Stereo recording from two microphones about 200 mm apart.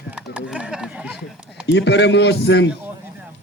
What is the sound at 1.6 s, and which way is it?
A man's voice, 60° left (ahead or behind).